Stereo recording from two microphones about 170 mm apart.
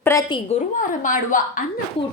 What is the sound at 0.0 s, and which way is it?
Speech, 20° left (ahead or behind).